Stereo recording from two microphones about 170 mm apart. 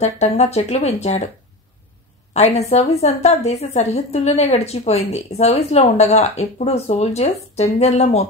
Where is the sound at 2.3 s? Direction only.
40° left (ahead or behind).